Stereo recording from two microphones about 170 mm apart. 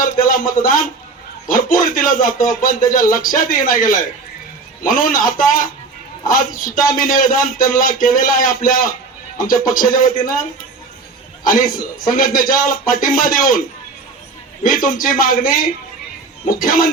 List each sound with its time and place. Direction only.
0.0 s a man's voice: 55° left (ahead or behind)
11.4 s a man's voice: 55° left (ahead or behind)
14.6 s a man's voice: 55° left (ahead or behind)